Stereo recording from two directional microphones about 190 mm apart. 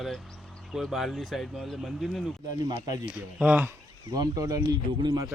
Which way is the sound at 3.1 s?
5° right (ahead or behind).